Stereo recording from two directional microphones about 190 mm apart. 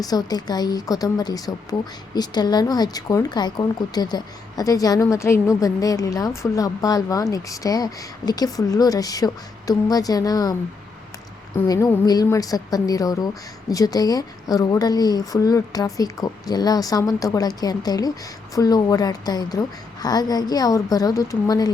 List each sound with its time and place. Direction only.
0.0 s a woman's voice: 20° left (ahead or behind)
11.5 s a woman's voice: 15° left (ahead or behind)